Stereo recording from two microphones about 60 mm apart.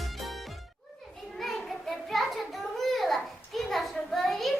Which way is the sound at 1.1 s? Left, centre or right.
Centre.